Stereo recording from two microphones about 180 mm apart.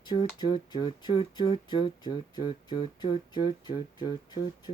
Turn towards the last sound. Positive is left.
turn(degrees=20)  # may be behind; listen again after turning